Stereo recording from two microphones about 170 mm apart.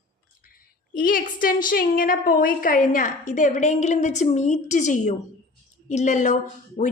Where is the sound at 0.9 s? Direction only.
55° left (ahead or behind).